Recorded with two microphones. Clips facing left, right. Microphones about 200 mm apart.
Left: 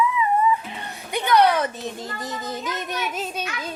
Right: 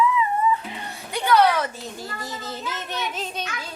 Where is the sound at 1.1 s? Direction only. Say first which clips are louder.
Left 1 dB; 20° left (ahead or behind).